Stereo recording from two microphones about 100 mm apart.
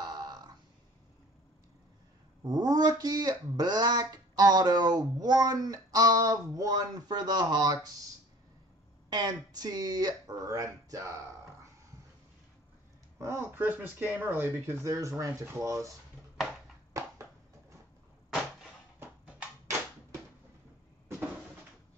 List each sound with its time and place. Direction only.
0.0 s burping: 40° right (ahead or behind)
2.4 s speech: 40° right (ahead or behind)
9.1 s speech: 45° right (ahead or behind)
13.2 s speech: 25° right (ahead or behind)
14.8 s speech: 30° right (ahead or behind)
16.9 s a sound: 30° right (ahead or behind)